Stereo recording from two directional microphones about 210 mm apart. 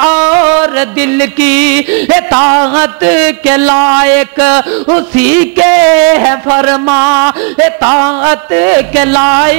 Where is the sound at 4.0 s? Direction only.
15° right (ahead or behind).